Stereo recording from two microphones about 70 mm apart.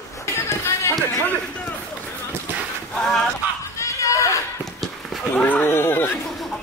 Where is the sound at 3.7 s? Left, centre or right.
Left.